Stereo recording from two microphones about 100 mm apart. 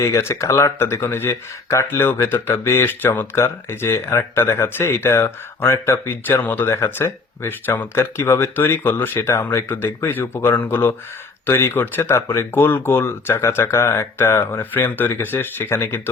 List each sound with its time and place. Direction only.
0.0 s speech: 25° left (ahead or behind)